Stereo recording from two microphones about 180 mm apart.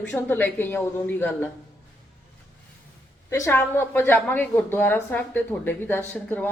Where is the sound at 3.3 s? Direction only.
15° left (ahead or behind).